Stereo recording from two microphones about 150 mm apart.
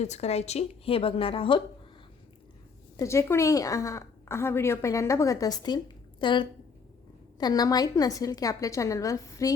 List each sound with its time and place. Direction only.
0.0 s a woman's voice: 45° left (ahead or behind)
3.0 s a woman's voice: 20° left (ahead or behind)